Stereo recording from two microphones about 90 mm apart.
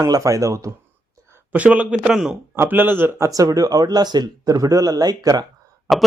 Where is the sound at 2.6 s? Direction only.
25° right (ahead or behind).